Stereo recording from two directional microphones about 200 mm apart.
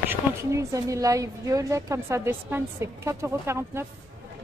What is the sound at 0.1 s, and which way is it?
Speech, 15° right (ahead or behind).